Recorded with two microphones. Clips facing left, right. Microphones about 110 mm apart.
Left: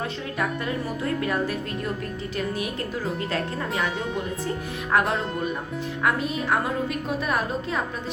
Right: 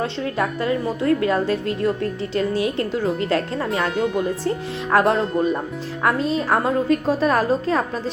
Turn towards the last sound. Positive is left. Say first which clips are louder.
# right 7 dB
turn(degrees=-35)  # may be behind; listen again after turning